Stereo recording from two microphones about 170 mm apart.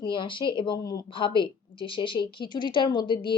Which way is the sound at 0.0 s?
30° left (ahead or behind).